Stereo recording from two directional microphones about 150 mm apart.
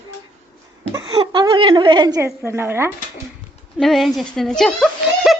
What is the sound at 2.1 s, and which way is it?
Speech, 10° right (ahead or behind).